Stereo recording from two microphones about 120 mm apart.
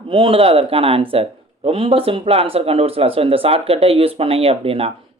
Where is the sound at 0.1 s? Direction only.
50° right (ahead or behind).